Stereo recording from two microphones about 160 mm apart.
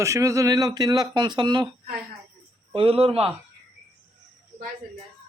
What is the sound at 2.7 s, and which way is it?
Speech, 35° right (ahead or behind).